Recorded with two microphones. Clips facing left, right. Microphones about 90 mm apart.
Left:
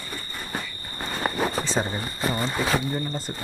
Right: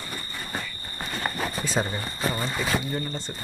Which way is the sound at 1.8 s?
5° left (ahead or behind).